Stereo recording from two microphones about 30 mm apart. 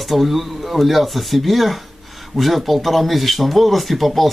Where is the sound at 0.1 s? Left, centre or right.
Centre.